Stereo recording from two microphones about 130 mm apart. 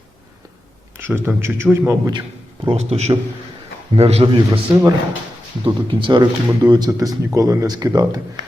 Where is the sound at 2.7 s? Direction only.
55° right (ahead or behind).